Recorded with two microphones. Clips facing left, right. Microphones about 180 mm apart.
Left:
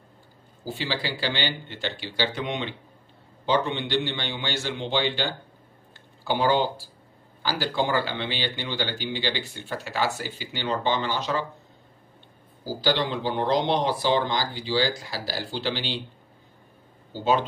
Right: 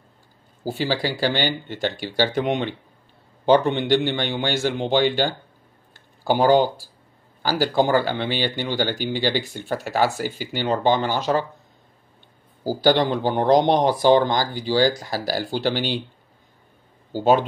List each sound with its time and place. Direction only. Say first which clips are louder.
0.7 s speech: right 6 dB; 40° right (ahead or behind)
12.8 s speech: right 6 dB; 50° right (ahead or behind)
17.1 s speech: right 6 dB; 45° right (ahead or behind)